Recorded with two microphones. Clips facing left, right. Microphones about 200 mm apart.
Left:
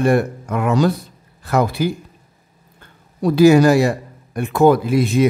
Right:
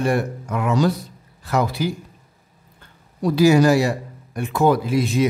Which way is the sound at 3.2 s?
55° left (ahead or behind).